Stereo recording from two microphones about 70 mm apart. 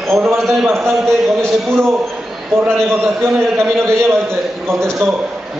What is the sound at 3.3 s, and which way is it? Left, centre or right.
A man's voice, right.